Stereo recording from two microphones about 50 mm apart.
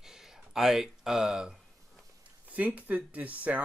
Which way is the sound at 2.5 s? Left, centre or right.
Right.